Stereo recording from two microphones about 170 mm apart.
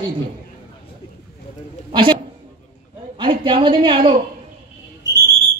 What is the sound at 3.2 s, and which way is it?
Speech, 30° right (ahead or behind).